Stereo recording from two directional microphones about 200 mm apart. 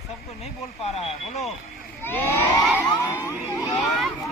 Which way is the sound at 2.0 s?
10° left (ahead or behind).